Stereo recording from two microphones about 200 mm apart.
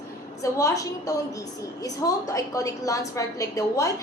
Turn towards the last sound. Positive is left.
turn(degrees=15)  # may be behind; listen again after turning